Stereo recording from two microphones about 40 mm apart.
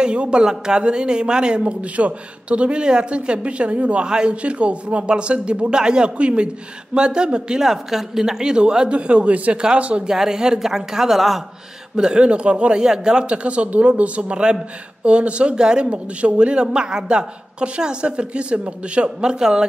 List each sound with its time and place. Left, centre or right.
0.0 s speech: right
1.6 s speech: right
4.0 s speech: right
7.6 s speech: centre; by 10.0 s right
10.0 s speech: centre
12.0 s speech: right
15.9 s speech: right